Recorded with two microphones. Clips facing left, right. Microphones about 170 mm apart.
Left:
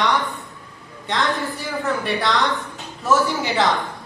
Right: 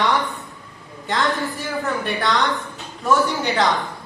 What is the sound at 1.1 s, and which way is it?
A man's voice, centre (ahead or behind).